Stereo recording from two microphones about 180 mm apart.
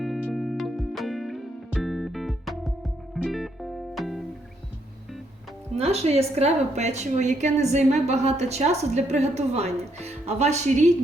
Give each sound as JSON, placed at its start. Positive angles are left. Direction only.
{"t": 0.0, "sound": "music", "side_deg": 5}
{"t": 5.7, "sound": "a woman's voice", "side_deg": -35}